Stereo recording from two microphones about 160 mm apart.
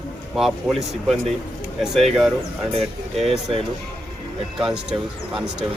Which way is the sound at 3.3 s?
40° right (ahead or behind).